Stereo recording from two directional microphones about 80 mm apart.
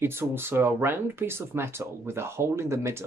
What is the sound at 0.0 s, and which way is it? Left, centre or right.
Speech, right.